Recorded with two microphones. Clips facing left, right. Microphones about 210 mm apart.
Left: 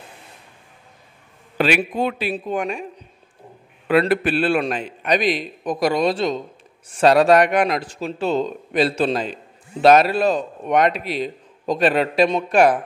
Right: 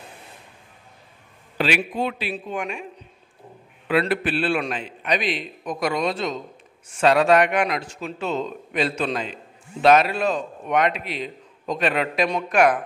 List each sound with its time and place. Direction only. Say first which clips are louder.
1.6 s speech: left 4 dB; 50° left (ahead or behind)
3.8 s a man's voice: left 4 dB; 45° left (ahead or behind)